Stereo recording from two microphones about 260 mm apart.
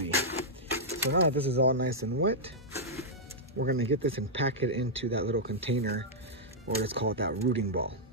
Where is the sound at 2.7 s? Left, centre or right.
Centre.